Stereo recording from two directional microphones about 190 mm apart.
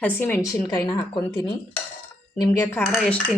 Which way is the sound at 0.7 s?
25° left (ahead or behind).